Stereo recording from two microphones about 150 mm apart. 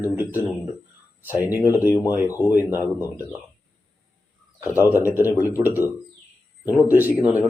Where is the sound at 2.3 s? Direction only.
20° left (ahead or behind).